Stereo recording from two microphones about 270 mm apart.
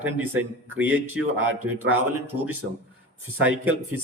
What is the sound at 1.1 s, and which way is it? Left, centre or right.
Speech, right.